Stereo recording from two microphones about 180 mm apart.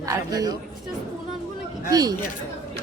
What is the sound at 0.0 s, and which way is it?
Speech, 20° right (ahead or behind).